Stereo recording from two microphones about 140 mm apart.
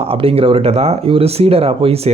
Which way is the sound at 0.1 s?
45° right (ahead or behind).